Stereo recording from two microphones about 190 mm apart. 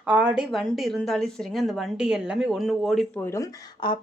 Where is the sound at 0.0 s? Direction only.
5° right (ahead or behind).